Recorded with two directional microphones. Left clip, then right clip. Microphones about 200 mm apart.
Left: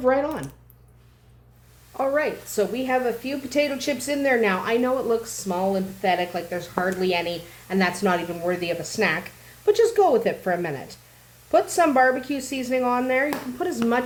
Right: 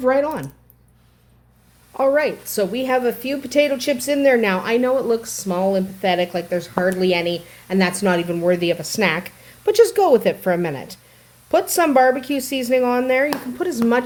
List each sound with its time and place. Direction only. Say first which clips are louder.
0.0 s a woman's voice: right 4 dB; 50° right (ahead or behind)
2.0 s a woman's voice: right 6 dB; 50° right (ahead or behind)